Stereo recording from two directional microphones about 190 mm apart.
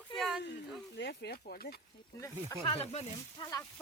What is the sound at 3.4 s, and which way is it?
Speech, 20° left (ahead or behind).